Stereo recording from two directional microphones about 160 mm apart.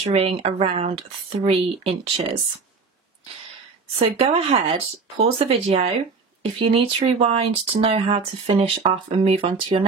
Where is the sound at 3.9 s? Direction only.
40° right (ahead or behind).